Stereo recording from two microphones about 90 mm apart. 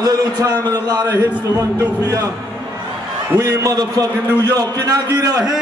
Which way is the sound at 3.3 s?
40° right (ahead or behind).